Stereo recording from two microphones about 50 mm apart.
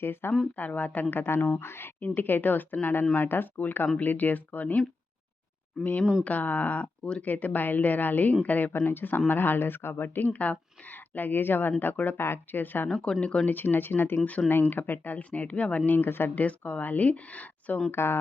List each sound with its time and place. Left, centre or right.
0.0 s speech: left
0.5 s speech: left
1.1 s speech: left
2.0 s speech: left
6.2 s speech: left
12.1 s speech: left
13.0 s speech: left
13.4 s speech: left
14.3 s speech: left
14.5 s speech: left
15.9 s speech: left
16.3 s speech: left
17.9 s speech: left